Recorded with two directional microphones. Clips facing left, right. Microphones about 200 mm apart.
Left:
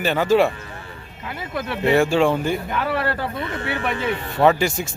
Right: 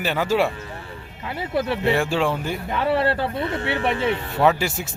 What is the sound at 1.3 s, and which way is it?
Speech, 30° right (ahead or behind).